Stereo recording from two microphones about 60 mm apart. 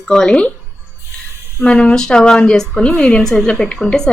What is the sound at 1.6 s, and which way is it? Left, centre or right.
A woman's voice, centre.